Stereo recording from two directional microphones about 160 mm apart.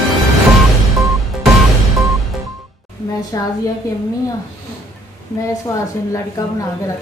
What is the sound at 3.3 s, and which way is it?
Speech, 20° left (ahead or behind).